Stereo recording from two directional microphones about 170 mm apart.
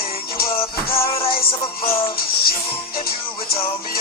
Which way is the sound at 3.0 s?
60° left (ahead or behind).